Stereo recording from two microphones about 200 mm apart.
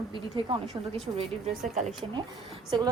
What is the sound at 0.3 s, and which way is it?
Speech, 25° right (ahead or behind).